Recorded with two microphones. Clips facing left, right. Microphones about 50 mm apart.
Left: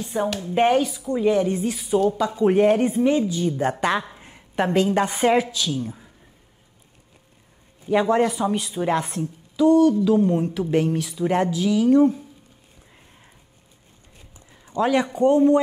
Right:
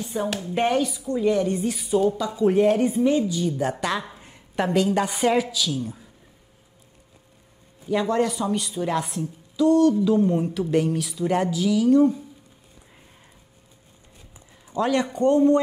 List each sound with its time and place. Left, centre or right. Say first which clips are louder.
0.1 s speech: left 4 dB; centre
1.6 s speech: left 1 dB; centre
2.2 s speech: left 2 dB; left
4.0 s a woman's voice: even; centre
7.9 s speech: left 3 dB; left
8.9 s speech: left 2 dB; centre
14.8 s speech: left 2 dB; centre